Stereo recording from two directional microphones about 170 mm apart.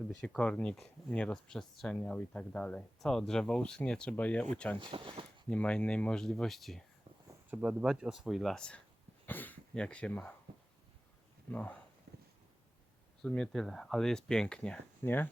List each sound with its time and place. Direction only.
0.1 s speech: 5° left (ahead or behind)
4.8 s speech: 30° right (ahead or behind)
5.5 s speech: 5° left (ahead or behind)
11.5 s speech: 10° left (ahead or behind)
12.1 s a sound: 80° right
13.2 s speech: 5° left (ahead or behind)